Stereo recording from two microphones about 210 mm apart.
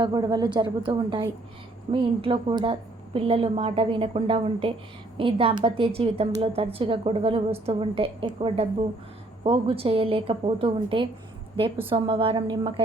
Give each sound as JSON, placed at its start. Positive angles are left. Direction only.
{"t": 0.0, "sound": "a woman's voice", "side_deg": -20}